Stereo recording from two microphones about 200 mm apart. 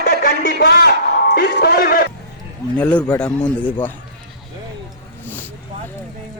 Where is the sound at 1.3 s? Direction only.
55° left (ahead or behind).